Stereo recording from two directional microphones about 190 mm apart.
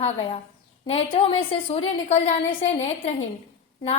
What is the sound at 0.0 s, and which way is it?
A woman's voice, 30° left (ahead or behind).